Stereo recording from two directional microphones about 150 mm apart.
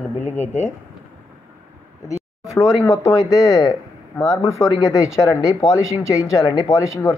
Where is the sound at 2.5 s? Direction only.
20° left (ahead or behind).